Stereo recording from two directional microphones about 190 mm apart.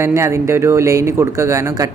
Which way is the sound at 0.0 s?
15° right (ahead or behind).